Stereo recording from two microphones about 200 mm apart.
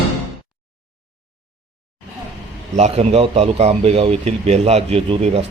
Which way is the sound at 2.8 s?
30° right (ahead or behind).